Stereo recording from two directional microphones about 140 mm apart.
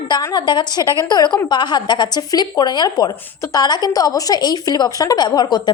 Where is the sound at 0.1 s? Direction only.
25° left (ahead or behind).